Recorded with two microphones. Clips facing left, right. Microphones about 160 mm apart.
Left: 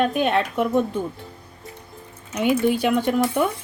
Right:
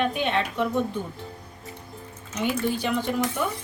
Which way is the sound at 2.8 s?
55° left (ahead or behind).